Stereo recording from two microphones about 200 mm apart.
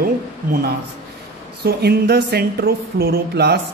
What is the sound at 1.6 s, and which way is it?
A man's voice, 50° right (ahead or behind).